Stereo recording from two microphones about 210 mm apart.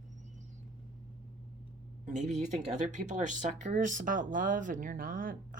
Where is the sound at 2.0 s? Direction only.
35° right (ahead or behind).